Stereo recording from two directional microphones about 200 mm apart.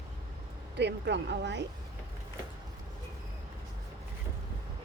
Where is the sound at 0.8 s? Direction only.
60° right (ahead or behind).